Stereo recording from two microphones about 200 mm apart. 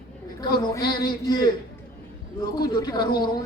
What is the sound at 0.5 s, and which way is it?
A man's voice, 20° left (ahead or behind).